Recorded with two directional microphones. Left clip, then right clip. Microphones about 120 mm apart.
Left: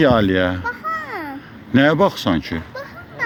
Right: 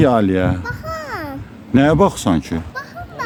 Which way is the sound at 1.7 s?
40° right (ahead or behind).